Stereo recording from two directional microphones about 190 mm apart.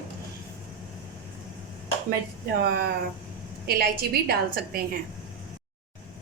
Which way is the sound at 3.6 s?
55° right (ahead or behind).